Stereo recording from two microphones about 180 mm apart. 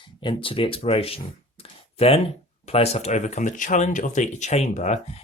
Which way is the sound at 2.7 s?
35° left (ahead or behind).